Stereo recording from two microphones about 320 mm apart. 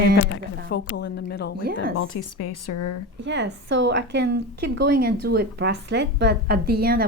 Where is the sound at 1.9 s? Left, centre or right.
Left.